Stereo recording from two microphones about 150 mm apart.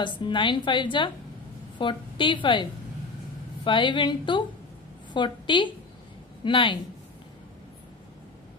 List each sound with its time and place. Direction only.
0.0 s a woman's voice: 30° left (ahead or behind)